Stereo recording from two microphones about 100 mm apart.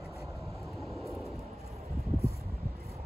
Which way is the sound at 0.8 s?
Centre (ahead or behind).